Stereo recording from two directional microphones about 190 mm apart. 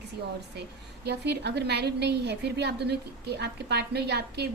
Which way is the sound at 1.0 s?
60° right (ahead or behind).